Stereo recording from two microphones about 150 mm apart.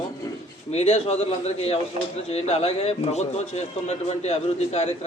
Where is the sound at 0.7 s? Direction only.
45° left (ahead or behind).